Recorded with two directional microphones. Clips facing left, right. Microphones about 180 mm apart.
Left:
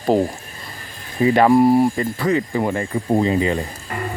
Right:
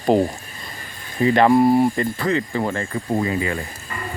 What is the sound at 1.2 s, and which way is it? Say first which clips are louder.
Speech: left 1 dB; 10° left (ahead or behind).